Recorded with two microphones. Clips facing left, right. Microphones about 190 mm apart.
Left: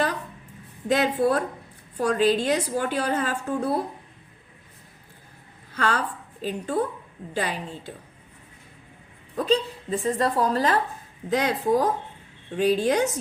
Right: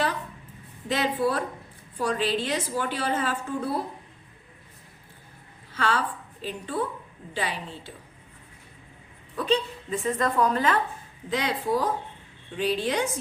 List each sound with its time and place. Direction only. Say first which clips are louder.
0.9 s a woman's voice: left 4 dB; 45° left (ahead or behind)
5.7 s a woman's voice: left 1 dB; 45° left (ahead or behind)
9.3 s a woman's voice: left 2 dB; 40° left (ahead or behind)